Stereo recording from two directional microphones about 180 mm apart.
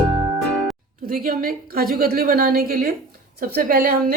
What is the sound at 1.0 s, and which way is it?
A woman's voice, 55° right (ahead or behind).